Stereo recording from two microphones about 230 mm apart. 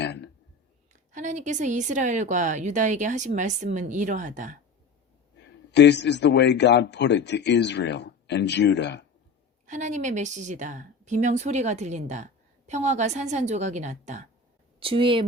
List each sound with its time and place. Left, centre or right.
0.0 s a sound: left
1.1 s a woman's voice: right
5.4 s a man's voice: left
9.6 s a woman's voice: right